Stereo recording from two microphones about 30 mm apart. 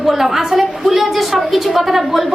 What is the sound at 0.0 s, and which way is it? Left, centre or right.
A woman's voice, centre.